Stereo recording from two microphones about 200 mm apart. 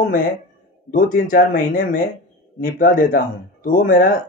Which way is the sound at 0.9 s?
45° left (ahead or behind).